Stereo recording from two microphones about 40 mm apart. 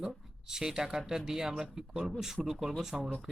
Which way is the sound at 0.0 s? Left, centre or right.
Centre.